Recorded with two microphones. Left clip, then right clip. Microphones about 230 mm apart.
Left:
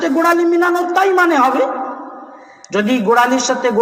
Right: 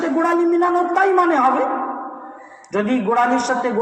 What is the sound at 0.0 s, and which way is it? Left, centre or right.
A man's voice, left.